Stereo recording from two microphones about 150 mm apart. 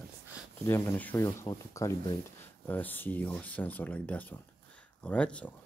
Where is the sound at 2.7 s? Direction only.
10° left (ahead or behind).